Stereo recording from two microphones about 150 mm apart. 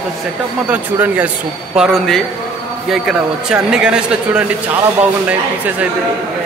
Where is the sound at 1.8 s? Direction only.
Centre (ahead or behind).